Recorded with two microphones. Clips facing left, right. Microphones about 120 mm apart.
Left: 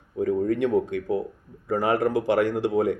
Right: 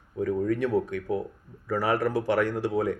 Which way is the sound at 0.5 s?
20° left (ahead or behind).